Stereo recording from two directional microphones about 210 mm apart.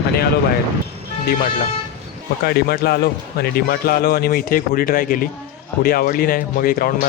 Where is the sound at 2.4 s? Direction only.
50° left (ahead or behind).